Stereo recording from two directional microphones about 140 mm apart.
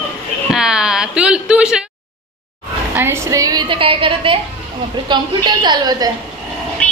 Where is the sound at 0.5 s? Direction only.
5° right (ahead or behind).